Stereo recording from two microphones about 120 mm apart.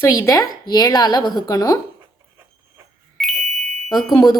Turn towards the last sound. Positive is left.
turn(degrees=30)  # may be behind; listen again after turning